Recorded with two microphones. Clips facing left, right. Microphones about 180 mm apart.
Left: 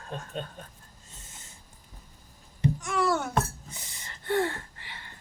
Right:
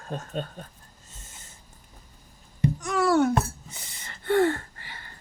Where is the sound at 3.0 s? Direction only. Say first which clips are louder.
Right 8 dB; 65° right (ahead or behind).